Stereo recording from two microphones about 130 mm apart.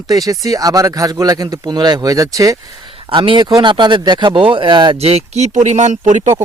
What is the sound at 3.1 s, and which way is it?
Speech, 35° right (ahead or behind).